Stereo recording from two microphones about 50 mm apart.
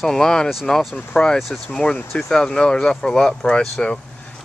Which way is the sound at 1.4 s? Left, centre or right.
Centre.